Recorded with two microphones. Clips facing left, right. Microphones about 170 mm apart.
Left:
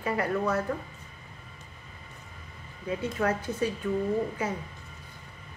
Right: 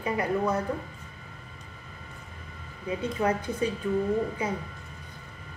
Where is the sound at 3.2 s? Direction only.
20° right (ahead or behind).